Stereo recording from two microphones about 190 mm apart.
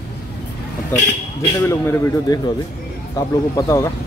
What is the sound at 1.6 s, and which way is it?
A man's voice, 15° left (ahead or behind).